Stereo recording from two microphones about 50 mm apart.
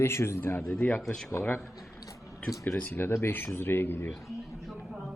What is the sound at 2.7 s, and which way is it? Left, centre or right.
Speech, left.